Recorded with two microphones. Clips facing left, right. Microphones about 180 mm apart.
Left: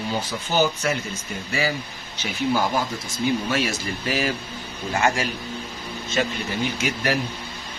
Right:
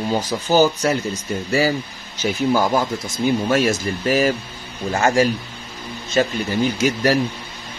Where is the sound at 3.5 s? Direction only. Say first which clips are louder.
Right 7 dB; 45° right (ahead or behind).